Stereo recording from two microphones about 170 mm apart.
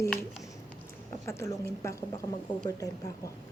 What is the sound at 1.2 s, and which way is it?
Speech, 15° left (ahead or behind).